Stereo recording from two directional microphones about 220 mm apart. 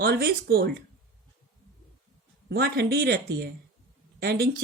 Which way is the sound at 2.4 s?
45° right (ahead or behind).